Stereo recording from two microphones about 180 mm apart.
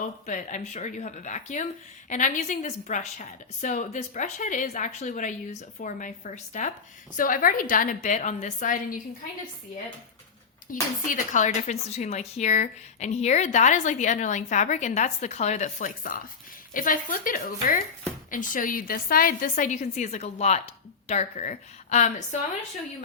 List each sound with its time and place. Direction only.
0.3 s a woman's voice: 45° left (ahead or behind)
10.7 s a woman's voice: 50° left (ahead or behind)